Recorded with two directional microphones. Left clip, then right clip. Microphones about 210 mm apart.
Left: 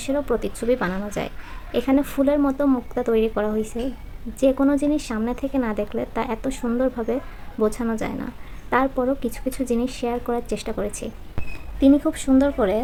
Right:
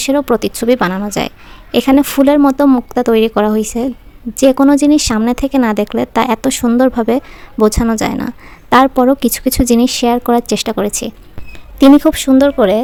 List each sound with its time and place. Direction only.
0.0 s speech: 50° right (ahead or behind)